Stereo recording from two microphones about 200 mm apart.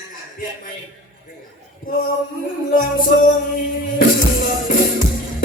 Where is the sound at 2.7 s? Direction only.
40° left (ahead or behind).